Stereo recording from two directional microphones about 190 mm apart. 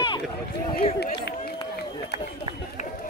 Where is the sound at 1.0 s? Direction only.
55° left (ahead or behind).